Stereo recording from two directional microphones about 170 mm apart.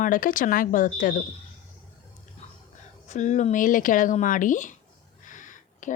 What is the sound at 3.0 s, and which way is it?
Speech, 45° left (ahead or behind).